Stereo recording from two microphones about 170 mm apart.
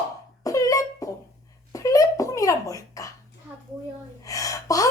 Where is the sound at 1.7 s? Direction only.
20° left (ahead or behind).